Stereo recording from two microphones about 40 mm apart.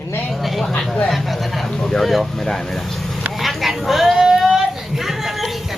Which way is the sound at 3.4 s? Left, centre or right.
Centre.